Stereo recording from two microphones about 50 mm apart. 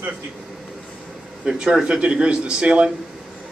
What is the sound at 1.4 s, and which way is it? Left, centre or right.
Speech, right.